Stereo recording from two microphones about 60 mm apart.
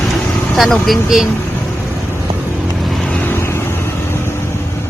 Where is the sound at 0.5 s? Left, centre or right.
Centre.